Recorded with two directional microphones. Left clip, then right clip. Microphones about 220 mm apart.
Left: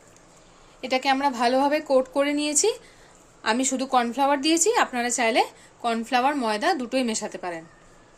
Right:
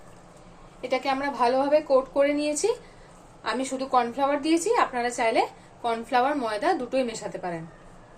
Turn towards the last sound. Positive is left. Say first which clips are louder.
# left 1 dB
turn(degrees=50)  # may be behind; listen again after turning